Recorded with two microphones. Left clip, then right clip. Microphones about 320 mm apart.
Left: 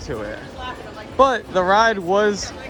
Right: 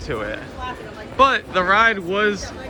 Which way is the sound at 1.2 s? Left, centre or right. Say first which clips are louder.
Even; centre.